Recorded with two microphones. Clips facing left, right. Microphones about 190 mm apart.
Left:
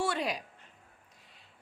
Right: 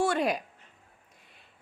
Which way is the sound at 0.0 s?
50° right (ahead or behind).